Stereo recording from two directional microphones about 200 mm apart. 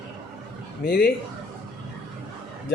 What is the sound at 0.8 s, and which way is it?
Speech, 50° left (ahead or behind).